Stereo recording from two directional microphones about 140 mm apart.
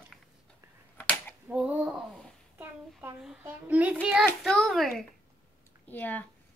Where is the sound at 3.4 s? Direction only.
10° right (ahead or behind).